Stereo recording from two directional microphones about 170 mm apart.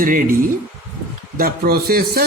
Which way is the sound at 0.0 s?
55° right (ahead or behind).